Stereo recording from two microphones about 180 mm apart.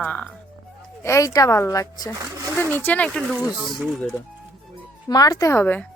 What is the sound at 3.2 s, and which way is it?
Speech, 10° right (ahead or behind).